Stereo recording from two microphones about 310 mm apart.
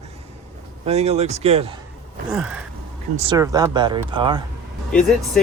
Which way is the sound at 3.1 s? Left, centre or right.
Centre.